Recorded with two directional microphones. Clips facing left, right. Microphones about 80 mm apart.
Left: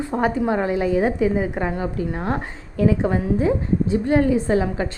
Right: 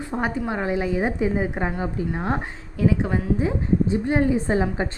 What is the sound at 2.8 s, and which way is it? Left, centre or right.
Speech, centre.